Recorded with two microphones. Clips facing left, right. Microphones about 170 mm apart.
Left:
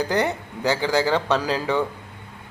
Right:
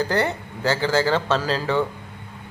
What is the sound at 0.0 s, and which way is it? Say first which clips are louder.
A man's voice: even; 15° left (ahead or behind).